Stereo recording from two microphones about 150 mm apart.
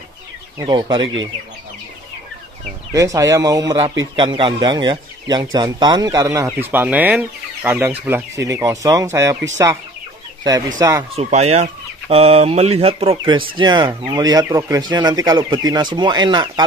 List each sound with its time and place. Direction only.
0.6 s speech: 30° right (ahead or behind)
2.9 s speech: 20° right (ahead or behind)
10.8 s speech: 20° right (ahead or behind)
11.1 s speech: 45° right (ahead or behind); by 16.6 s 30° right (ahead or behind)